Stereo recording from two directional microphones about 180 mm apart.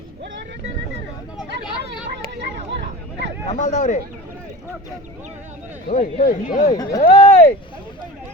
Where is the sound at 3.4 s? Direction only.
40° left (ahead or behind).